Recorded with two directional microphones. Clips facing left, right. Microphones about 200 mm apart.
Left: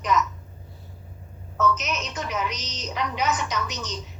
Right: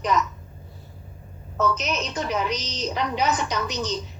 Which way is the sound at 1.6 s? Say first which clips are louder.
Right 1 dB; 30° right (ahead or behind).